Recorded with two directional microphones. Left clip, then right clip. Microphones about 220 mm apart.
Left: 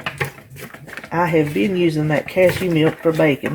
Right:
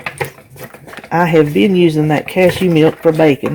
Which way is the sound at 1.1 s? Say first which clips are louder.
Right 6 dB; 45° right (ahead or behind).